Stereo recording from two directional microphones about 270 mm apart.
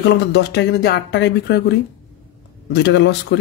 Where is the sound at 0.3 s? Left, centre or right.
Left.